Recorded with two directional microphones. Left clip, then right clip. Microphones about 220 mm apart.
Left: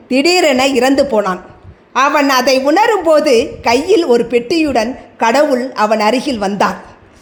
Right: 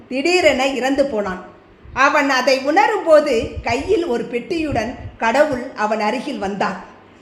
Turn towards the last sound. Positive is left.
turn(degrees=35)  # may be behind; listen again after turning